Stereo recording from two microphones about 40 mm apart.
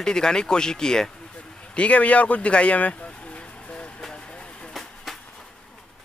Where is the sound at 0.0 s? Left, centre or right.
Centre.